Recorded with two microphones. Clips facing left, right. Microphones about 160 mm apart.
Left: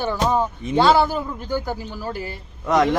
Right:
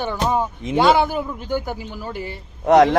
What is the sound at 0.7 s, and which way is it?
A man's voice, 20° right (ahead or behind).